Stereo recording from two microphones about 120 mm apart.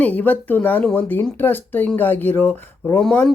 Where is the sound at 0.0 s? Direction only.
15° left (ahead or behind).